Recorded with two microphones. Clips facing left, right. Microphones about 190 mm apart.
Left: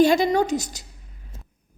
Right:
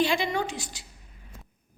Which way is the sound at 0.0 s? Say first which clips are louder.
Left 8 dB; 40° left (ahead or behind).